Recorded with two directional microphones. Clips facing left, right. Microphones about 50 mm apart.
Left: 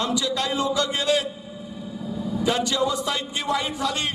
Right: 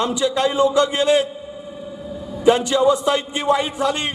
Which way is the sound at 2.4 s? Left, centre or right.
Right.